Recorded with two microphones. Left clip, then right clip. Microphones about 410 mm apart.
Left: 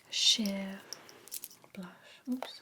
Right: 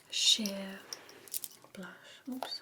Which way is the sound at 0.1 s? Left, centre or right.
Left.